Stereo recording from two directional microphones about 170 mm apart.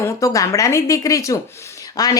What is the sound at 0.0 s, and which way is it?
A woman's voice, 20° left (ahead or behind).